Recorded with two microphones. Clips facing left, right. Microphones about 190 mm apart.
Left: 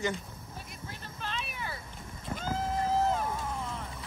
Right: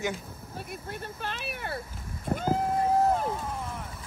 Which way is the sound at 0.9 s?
55° right (ahead or behind).